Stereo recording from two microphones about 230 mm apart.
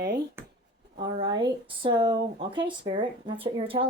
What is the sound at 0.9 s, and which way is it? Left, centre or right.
Speech, centre.